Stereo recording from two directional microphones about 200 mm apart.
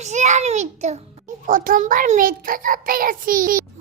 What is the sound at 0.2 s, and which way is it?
A child's voice, 35° right (ahead or behind).